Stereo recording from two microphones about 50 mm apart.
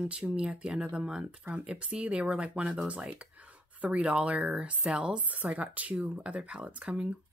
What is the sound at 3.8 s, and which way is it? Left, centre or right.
Speech, right.